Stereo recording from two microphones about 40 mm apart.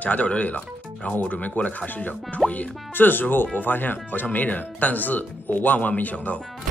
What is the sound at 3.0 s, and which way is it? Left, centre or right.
Speech, left.